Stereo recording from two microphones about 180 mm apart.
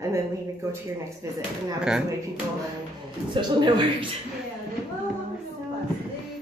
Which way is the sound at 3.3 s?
25° right (ahead or behind).